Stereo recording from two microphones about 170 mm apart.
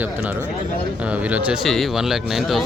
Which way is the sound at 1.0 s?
10° right (ahead or behind).